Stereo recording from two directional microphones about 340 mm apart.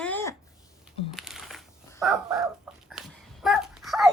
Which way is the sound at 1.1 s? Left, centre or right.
Centre.